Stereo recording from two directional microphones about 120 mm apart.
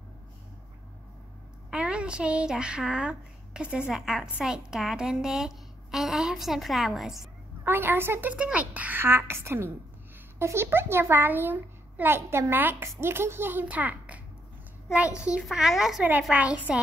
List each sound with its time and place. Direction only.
1.7 s a woman's voice: 10° right (ahead or behind)
7.6 s a child's voice: 20° right (ahead or behind)